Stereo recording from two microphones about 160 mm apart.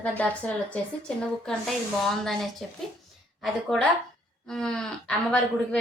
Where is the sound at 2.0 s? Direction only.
Centre (ahead or behind).